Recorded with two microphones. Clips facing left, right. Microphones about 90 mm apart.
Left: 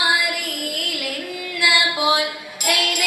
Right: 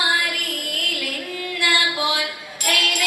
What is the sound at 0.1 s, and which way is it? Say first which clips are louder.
Music: left 1 dB; 15° left (ahead or behind).